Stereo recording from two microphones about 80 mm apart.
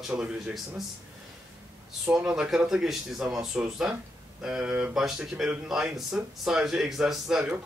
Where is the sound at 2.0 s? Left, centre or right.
Centre.